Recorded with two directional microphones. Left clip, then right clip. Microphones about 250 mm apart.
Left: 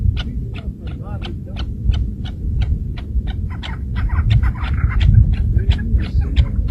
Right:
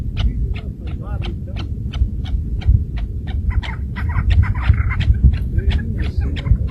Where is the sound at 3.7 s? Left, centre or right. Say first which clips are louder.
Right 2 dB; right.